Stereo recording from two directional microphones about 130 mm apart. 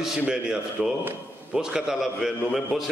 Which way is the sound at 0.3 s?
5° right (ahead or behind).